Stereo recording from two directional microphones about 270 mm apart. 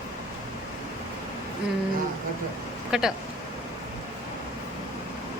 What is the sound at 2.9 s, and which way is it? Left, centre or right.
Speech, centre.